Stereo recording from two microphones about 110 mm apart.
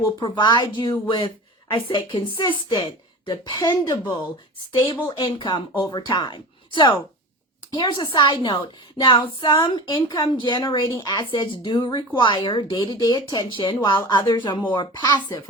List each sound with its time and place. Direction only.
0.2 s speech: 40° left (ahead or behind)
4.7 s speech: 50° left (ahead or behind)